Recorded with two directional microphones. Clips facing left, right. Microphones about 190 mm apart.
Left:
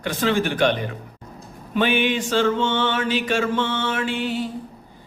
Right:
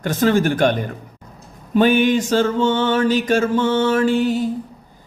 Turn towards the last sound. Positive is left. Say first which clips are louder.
# right 7 dB
turn(degrees=-40)  # may be behind; listen again after turning